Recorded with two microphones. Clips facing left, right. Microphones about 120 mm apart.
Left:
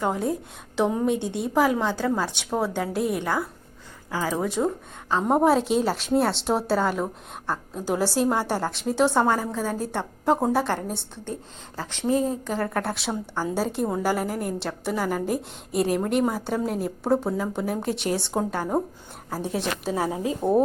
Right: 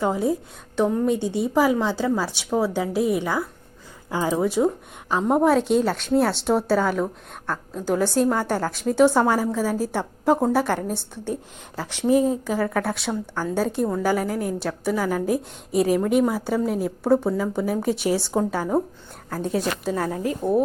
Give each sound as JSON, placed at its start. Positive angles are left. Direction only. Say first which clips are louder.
{"t": 0.0, "sound": "a woman's voice", "louder": "right 3 dB", "side_deg": -5}
{"t": 4.1, "sound": "speech", "louder": "right 3 dB", "side_deg": -25}
{"t": 4.4, "sound": "speech", "louder": "right 5 dB", "side_deg": -5}
{"t": 5.2, "sound": "a woman's voice", "louder": "right 1 dB", "side_deg": 5}
{"t": 20.0, "sound": "speech", "louder": "right 1 dB", "side_deg": 15}